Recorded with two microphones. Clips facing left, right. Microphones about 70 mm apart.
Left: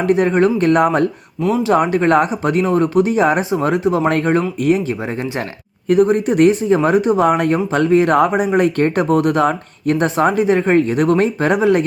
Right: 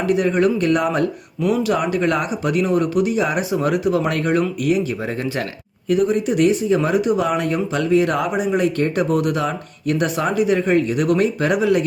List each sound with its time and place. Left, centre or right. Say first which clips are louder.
0.0 s speech: left 3 dB; left
1.4 s speech: left 2 dB; left
1.7 s speech: left 6 dB; left